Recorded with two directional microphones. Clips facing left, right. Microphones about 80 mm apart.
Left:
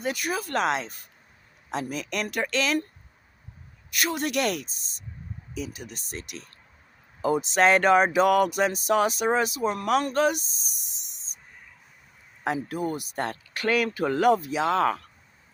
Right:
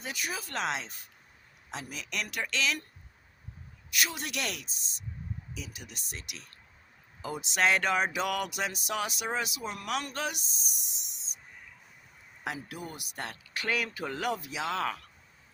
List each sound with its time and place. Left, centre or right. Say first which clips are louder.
0.0 s speech: left 8 dB; left
3.9 s speech: left 7 dB; left
12.6 s speech: left 12 dB; left